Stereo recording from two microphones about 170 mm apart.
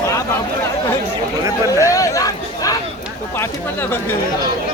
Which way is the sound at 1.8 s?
20° left (ahead or behind).